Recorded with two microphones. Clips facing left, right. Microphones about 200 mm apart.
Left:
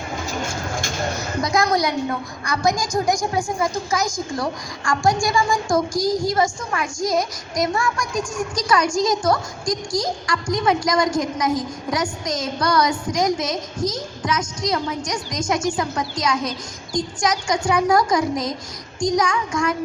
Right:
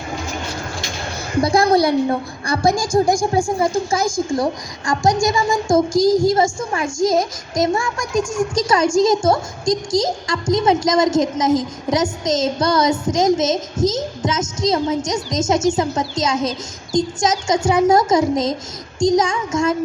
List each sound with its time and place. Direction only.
1.4 s a woman's voice: 30° right (ahead or behind)